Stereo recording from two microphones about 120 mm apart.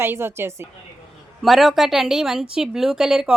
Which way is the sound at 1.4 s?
Centre (ahead or behind).